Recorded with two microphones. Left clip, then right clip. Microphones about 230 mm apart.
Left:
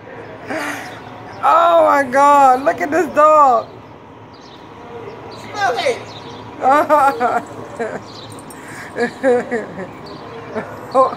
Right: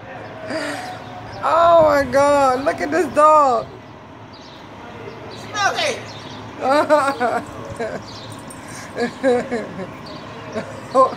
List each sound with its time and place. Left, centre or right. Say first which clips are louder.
0.5 s gasp: left 2 dB; centre
1.4 s a man's voice: left 2 dB; centre
6.6 s a man's voice: left 4 dB; centre
10.9 s speech: left 1 dB; centre